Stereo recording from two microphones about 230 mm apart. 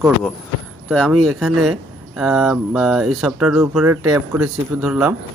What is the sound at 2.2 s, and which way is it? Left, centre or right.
Speech, centre.